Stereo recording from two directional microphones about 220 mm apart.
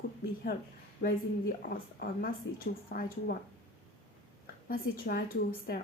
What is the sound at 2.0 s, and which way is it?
Speech, 40° left (ahead or behind).